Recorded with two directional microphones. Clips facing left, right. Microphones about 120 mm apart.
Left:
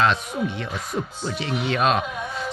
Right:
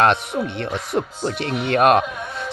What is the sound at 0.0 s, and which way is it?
Speech, 60° right (ahead or behind).